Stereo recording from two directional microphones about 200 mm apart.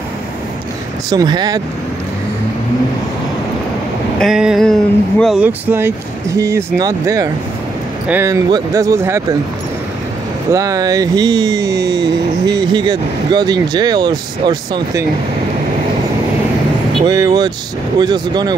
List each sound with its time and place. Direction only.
1.1 s speech: 20° right (ahead or behind)
4.2 s a sound: 5° right (ahead or behind)
5.2 s speech: 5° right (ahead or behind)
10.5 s speech: 15° right (ahead or behind)
17.0 s speech: 20° right (ahead or behind)